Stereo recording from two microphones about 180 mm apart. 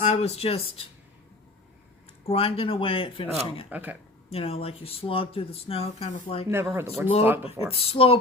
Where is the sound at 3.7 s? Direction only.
10° right (ahead or behind).